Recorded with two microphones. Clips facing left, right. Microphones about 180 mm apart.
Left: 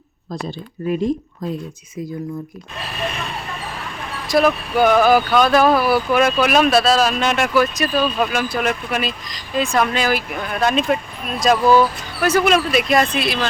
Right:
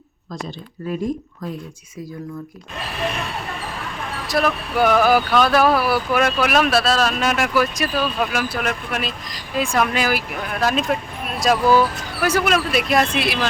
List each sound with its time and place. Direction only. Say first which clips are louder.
0.9 s speech: left 4 dB; 25° left (ahead or behind)
4.3 s speech: left 5 dB; centre (ahead or behind)